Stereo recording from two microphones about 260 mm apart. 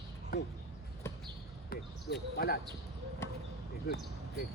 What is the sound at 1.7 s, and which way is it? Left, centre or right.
Speech, left.